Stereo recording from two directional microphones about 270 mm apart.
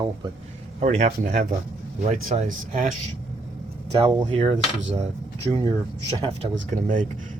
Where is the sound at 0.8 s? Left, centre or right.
Right.